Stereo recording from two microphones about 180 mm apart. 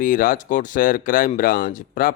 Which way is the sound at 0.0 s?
50° left (ahead or behind).